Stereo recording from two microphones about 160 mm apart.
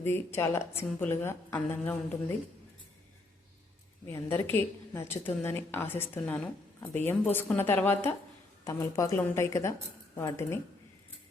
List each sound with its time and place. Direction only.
0.0 s a woman's voice: 15° left (ahead or behind)
4.0 s a woman's voice: 15° left (ahead or behind)